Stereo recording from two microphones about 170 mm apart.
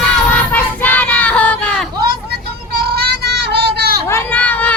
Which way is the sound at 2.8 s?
70° right (ahead or behind).